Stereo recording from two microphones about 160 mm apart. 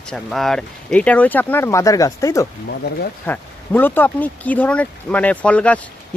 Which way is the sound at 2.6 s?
80° left.